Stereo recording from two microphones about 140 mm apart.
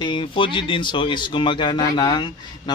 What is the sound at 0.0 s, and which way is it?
Speech, 35° left (ahead or behind).